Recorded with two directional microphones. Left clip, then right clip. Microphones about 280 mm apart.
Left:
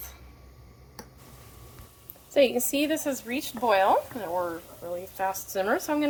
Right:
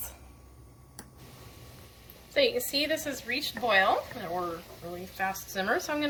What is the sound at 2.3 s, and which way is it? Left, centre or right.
A woman's voice, left.